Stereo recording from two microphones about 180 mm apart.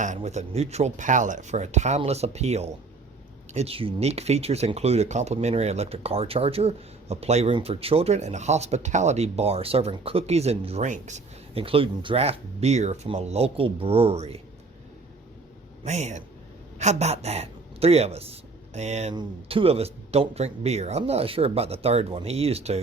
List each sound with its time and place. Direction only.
0.2 s speech: 35° right (ahead or behind)
15.8 s a man's voice: 40° right (ahead or behind)